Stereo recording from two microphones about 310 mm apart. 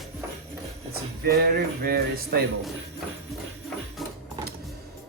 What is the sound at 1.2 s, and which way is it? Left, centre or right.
Music, right.